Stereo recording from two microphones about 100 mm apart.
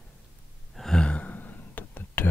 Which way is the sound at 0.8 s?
5° left (ahead or behind).